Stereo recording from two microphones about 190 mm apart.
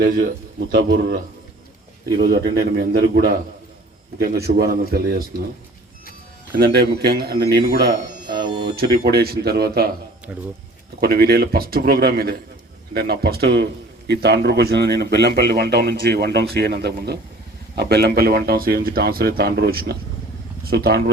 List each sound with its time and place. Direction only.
0.7 s speech: 60° right (ahead or behind)
6.6 s speech: 55° right (ahead or behind)
11.0 s speech: 55° right (ahead or behind)